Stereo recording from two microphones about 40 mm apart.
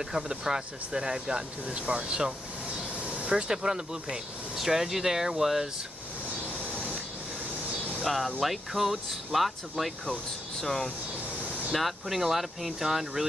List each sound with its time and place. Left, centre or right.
0.0 s speech: centre
3.0 s vehicle: right
3.3 s speech: centre
6.7 s rub: left
8.0 s speech: centre
10.6 s speech: centre
11.7 s speech: centre